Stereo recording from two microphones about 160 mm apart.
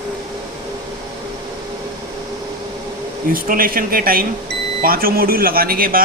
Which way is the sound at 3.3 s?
65° right (ahead or behind).